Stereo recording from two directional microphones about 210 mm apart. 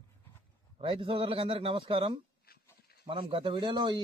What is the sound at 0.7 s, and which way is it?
Speech, 25° right (ahead or behind).